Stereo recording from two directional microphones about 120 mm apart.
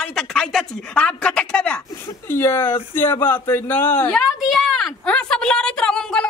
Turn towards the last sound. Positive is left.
turn(degrees=5)  # may be behind; listen again after turning